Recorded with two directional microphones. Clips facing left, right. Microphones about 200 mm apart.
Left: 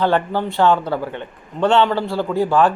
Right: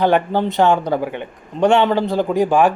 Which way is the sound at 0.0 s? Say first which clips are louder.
Right 3 dB; 15° right (ahead or behind).